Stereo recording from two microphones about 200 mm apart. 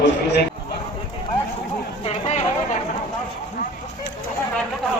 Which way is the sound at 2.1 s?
35° left (ahead or behind).